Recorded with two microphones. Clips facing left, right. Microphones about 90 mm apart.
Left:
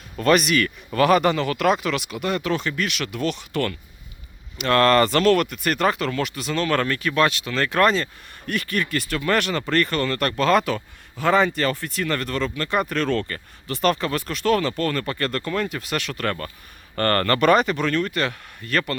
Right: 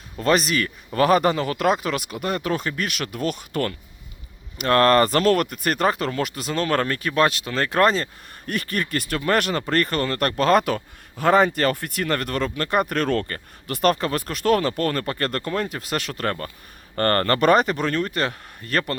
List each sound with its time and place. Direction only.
0.2 s speech: 30° right (ahead or behind)